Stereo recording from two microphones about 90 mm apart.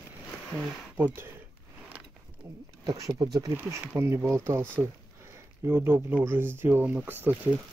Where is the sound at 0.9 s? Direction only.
20° right (ahead or behind).